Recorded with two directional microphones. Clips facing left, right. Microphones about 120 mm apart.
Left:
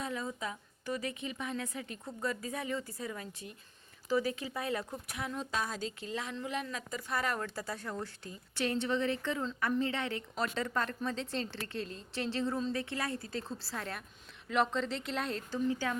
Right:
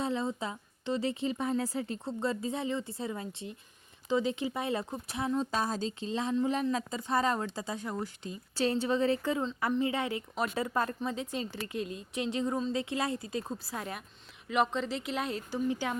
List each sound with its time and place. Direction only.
0.0 s a woman's voice: 25° right (ahead or behind)